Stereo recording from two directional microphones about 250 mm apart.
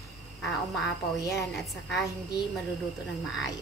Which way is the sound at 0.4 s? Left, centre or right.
Centre.